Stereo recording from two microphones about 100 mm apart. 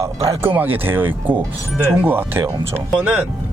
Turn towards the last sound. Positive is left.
turn(degrees=-15)  # may be behind; listen again after turning